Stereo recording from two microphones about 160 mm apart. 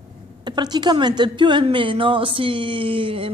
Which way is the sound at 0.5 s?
25° right (ahead or behind).